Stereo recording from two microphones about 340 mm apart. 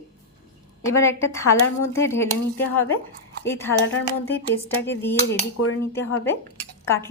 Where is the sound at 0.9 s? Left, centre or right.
Centre.